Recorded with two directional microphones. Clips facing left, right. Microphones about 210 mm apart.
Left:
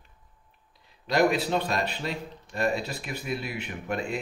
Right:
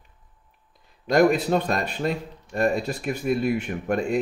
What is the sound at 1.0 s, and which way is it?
Speech, 50° right (ahead or behind).